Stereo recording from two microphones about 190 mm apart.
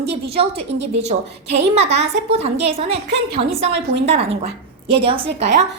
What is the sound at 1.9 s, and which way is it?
Speech, 65° right (ahead or behind).